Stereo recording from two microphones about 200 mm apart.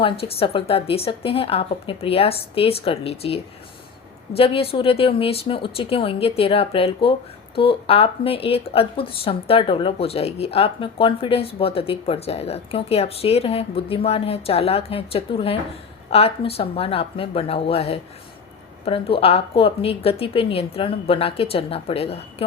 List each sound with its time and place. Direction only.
0.0 s speech: 30° left (ahead or behind)